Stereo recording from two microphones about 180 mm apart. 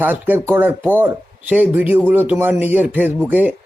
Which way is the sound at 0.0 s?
10° right (ahead or behind).